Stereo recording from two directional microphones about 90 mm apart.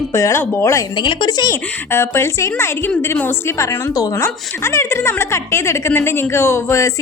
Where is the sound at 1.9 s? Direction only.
30° left (ahead or behind).